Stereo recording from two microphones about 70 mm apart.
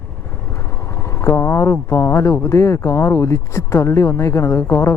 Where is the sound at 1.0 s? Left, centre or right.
Left.